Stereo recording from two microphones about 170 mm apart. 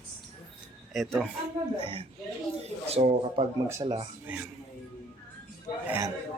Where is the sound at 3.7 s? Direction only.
15° right (ahead or behind).